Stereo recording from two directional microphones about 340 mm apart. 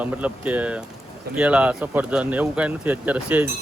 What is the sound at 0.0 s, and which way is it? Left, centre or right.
Speech, centre.